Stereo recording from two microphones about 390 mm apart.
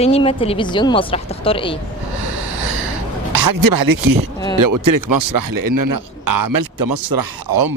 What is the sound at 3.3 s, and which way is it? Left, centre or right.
Speech, right.